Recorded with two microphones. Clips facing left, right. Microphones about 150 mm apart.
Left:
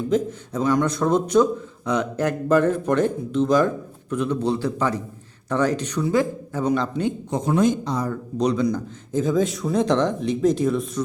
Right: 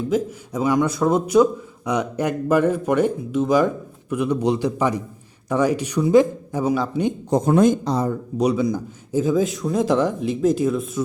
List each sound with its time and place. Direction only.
0.1 s a man's voice: 10° right (ahead or behind)
7.3 s speech: 45° right (ahead or behind)
7.9 s speech: 20° right (ahead or behind)
8.4 s speech: 10° right (ahead or behind)